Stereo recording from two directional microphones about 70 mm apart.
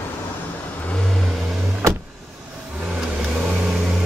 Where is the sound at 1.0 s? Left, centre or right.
Centre.